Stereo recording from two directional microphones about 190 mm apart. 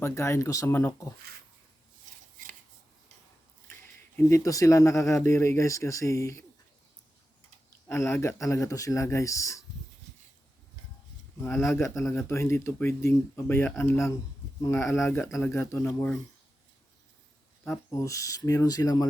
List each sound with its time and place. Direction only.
0.0 s speech: 15° left (ahead or behind)
4.3 s speech: 15° left (ahead or behind)
7.9 s speech: 15° left (ahead or behind)
11.3 s speech: 10° left (ahead or behind)
17.7 s speech: 15° left (ahead or behind)